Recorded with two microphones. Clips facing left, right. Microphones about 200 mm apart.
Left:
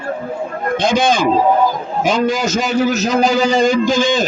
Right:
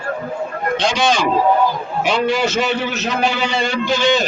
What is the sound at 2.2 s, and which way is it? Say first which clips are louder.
A man's voice: left 1 dB; 45° left (ahead or behind).